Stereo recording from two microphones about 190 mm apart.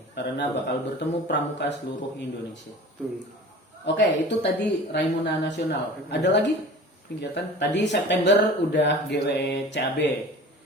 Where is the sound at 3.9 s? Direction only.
65° left (ahead or behind).